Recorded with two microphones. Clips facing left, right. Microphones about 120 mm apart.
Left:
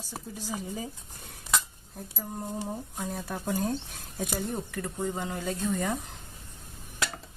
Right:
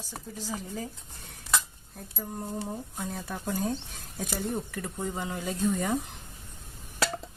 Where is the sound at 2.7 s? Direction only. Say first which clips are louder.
Left 1 dB; 5° left (ahead or behind).